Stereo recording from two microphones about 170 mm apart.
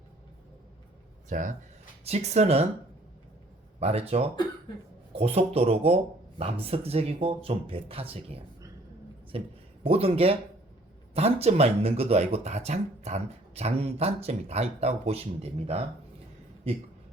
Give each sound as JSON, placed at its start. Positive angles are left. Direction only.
{"t": 1.3, "sound": "speech", "side_deg": -50}
{"t": 3.8, "sound": "speech", "side_deg": -35}